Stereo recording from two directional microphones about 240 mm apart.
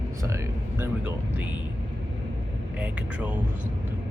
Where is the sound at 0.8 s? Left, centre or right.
Centre.